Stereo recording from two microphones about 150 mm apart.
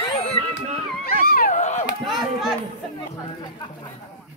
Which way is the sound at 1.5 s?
50° left (ahead or behind).